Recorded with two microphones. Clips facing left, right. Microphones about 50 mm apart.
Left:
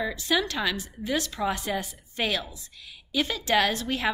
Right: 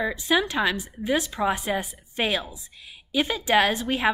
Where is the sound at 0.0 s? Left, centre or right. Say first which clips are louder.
Right 3 dB; centre.